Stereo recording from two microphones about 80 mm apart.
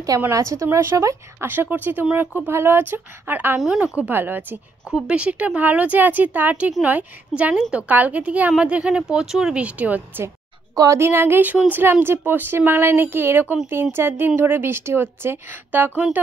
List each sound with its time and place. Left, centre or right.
0.3 s speech: right
1.5 s a woman's voice: right
3.5 s a woman's voice: centre; by 4.6 s right
4.9 s a woman's voice: centre
10.7 s a woman's voice: right
11.0 s a woman's voice: right
11.8 s a woman's voice: right